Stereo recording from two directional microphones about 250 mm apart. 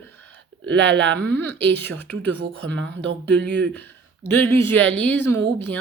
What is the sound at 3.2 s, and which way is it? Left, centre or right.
Speech, centre.